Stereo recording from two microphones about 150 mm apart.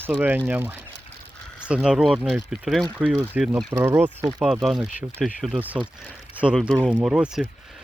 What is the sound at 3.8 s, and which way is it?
Speech, 15° right (ahead or behind).